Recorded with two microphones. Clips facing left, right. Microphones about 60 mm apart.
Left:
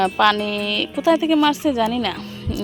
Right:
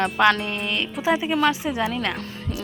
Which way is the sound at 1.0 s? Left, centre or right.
Right.